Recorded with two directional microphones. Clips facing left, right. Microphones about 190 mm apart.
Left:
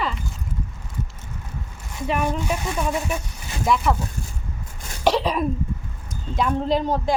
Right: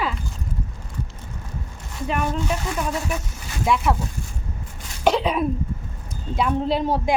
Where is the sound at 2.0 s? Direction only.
5° left (ahead or behind).